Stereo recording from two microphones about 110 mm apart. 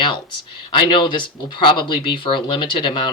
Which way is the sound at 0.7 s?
45° left (ahead or behind).